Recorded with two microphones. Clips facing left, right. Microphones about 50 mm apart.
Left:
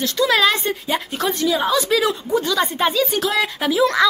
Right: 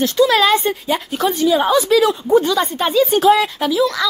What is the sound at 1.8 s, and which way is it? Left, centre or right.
A woman's voice, centre.